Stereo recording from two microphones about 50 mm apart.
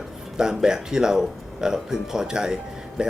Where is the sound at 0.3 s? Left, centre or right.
Centre.